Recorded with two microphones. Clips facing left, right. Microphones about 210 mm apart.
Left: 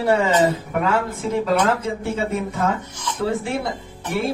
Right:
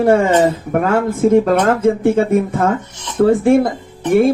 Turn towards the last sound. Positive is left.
turn(degrees=-50)  # may be behind; listen again after turning